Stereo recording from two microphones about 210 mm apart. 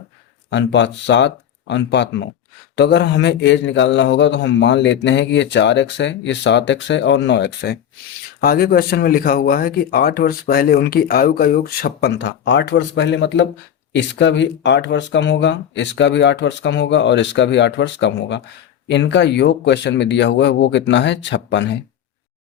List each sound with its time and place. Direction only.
0.5 s a man's voice: 55° left (ahead or behind)